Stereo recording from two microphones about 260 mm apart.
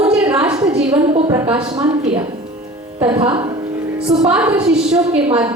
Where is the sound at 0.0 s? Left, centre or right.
Centre.